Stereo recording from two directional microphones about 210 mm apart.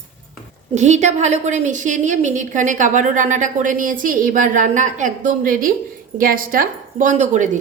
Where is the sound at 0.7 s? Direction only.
35° right (ahead or behind).